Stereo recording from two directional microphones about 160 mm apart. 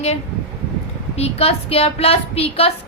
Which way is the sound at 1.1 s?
40° left (ahead or behind).